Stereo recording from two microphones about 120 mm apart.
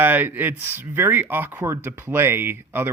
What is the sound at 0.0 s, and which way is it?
A man's voice, 15° right (ahead or behind).